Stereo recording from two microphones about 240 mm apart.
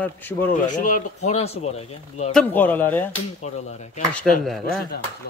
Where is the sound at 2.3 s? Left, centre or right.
Centre.